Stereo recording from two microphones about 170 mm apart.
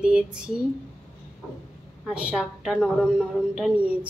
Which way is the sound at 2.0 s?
Centre (ahead or behind).